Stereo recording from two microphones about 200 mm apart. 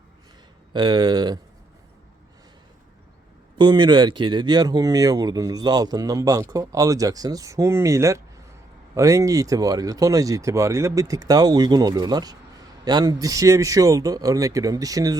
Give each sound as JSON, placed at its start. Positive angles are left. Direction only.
{"t": 0.7, "sound": "speech", "side_deg": -20}
{"t": 3.6, "sound": "speech", "side_deg": -20}